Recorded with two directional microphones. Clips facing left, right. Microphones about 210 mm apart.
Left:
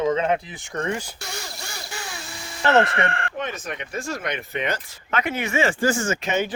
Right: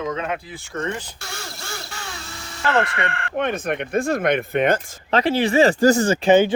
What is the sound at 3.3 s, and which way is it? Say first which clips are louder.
Speech: right 7 dB; 60° right (ahead or behind).